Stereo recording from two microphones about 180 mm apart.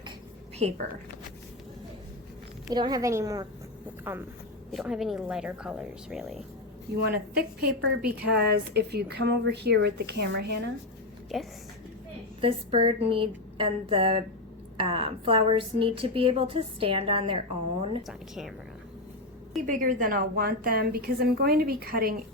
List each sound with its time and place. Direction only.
0.6 s a woman's voice: 40° right (ahead or behind)
2.6 s a woman's voice: 20° right (ahead or behind); by 6.3 s centre (ahead or behind)
7.0 s a woman's voice: 60° right (ahead or behind)
12.4 s a woman's voice: 30° right (ahead or behind)
18.0 s speech: centre (ahead or behind)
19.6 s a woman's voice: 50° right (ahead or behind)